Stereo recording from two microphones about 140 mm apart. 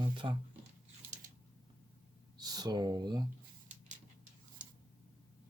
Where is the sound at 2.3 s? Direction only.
30° right (ahead or behind).